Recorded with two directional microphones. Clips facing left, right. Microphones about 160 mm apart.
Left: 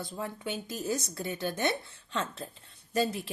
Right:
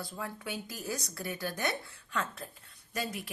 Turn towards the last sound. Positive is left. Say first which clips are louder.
# left 8 dB
turn(degrees=30)  # may be behind; listen again after turning